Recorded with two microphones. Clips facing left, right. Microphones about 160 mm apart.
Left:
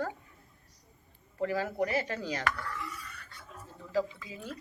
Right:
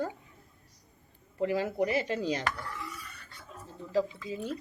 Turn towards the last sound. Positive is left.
turn(degrees=-25)  # may be behind; listen again after turning